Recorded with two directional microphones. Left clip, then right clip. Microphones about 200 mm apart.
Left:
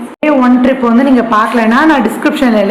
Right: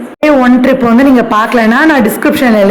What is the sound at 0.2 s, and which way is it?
Speech, 30° right (ahead or behind).